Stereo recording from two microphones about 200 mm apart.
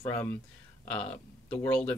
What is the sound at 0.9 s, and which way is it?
Speech, 10° left (ahead or behind).